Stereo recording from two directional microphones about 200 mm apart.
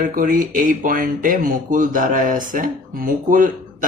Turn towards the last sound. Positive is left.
turn(degrees=-40)  # may be behind; listen again after turning